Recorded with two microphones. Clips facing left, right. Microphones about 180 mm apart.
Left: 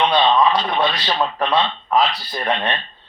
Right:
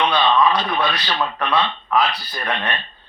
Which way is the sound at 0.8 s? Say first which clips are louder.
Left 2 dB; 30° left (ahead or behind).